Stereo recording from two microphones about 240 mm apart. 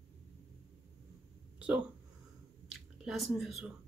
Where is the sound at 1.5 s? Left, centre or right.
Centre.